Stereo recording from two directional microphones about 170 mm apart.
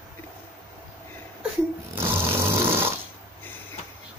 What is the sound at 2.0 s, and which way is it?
Snoring, 15° right (ahead or behind).